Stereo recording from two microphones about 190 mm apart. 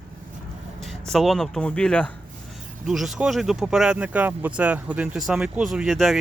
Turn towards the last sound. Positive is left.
turn(degrees=0)  # may be behind; listen again after turning